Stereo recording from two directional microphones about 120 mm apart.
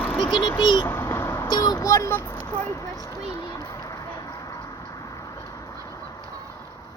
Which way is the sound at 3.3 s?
30° left (ahead or behind).